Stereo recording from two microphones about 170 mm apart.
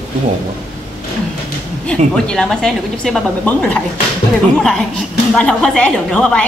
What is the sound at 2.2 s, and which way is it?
A woman's voice, 5° left (ahead or behind).